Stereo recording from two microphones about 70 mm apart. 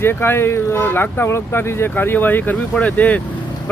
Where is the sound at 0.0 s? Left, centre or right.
Left.